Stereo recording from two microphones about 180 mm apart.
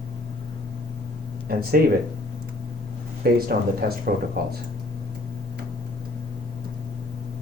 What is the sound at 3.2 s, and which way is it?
Speech, 55° right (ahead or behind).